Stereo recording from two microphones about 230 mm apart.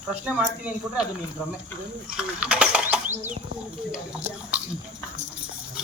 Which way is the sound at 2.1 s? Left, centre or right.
Centre.